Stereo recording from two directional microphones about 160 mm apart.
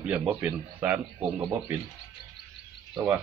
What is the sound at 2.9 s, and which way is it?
Speech, 15° right (ahead or behind).